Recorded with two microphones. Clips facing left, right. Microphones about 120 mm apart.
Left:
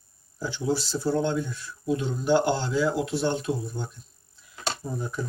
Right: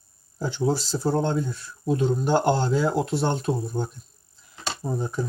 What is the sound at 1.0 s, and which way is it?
Speech, 40° right (ahead or behind).